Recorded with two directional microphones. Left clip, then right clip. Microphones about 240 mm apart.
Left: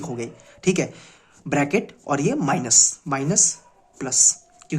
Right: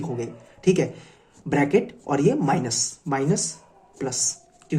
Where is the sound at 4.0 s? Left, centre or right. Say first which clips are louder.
Left 6 dB; left.